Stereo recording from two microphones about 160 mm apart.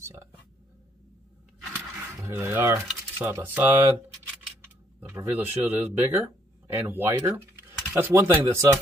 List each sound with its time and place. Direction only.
2.2 s speech: 15° right (ahead or behind)
5.0 s speech: 10° right (ahead or behind)